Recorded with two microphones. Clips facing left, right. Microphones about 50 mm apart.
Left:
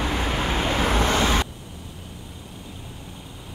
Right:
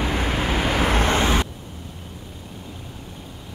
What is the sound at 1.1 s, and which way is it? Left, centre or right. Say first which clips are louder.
Vehicle: right 1 dB; centre.